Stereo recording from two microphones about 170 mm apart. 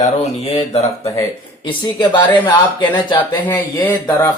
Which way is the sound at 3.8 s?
15° left (ahead or behind).